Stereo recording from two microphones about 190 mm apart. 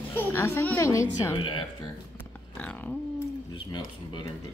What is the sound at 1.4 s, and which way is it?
Speech, 25° left (ahead or behind).